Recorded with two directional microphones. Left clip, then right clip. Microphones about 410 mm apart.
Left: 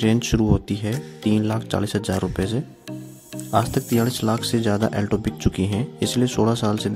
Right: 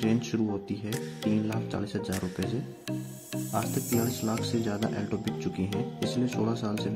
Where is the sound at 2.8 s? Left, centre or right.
Centre.